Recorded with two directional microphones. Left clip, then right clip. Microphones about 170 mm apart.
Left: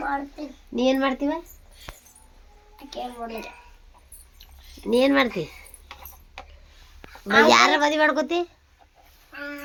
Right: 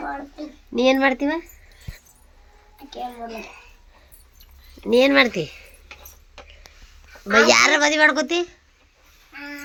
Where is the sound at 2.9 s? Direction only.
5° right (ahead or behind).